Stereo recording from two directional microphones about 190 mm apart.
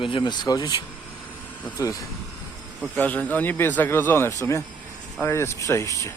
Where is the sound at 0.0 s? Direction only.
25° left (ahead or behind).